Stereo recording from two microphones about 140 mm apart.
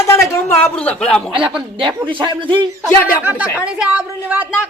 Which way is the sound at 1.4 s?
5° right (ahead or behind).